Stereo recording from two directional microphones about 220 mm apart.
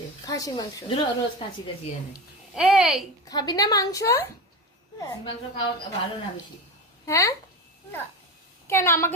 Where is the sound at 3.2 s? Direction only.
15° left (ahead or behind).